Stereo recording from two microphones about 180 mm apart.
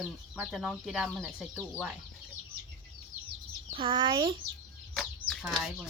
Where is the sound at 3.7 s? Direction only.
30° right (ahead or behind).